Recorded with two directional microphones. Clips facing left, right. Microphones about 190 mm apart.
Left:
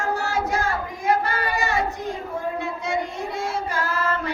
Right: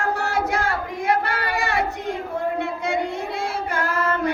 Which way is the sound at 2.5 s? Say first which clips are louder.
Right 2 dB; 60° right (ahead or behind).